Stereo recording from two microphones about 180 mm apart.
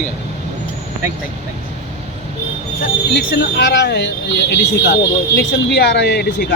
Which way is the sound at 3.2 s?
65° left (ahead or behind).